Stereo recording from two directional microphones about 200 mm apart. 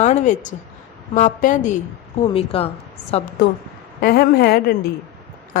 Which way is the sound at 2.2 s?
30° left (ahead or behind).